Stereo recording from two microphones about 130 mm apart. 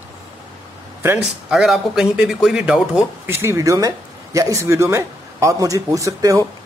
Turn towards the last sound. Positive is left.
turn(degrees=-25)  # may be behind; listen again after turning